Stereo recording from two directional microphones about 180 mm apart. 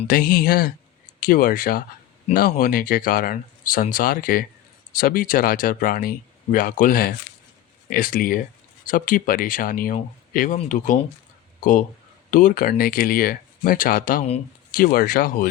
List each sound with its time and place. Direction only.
0.1 s speech: 55° left (ahead or behind)